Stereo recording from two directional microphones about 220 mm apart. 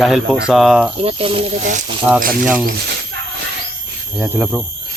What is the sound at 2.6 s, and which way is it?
Speech, 50° right (ahead or behind).